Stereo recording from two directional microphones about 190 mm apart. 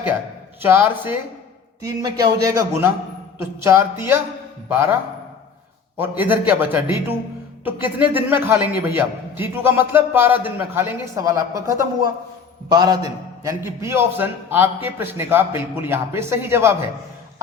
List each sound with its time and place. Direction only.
0.6 s a man's voice: 10° right (ahead or behind)
6.0 s a man's voice: 10° right (ahead or behind)